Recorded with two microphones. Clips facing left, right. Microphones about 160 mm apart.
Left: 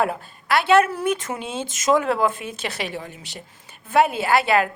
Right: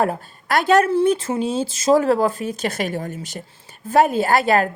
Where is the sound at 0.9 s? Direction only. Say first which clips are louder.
Right 7 dB; 30° right (ahead or behind).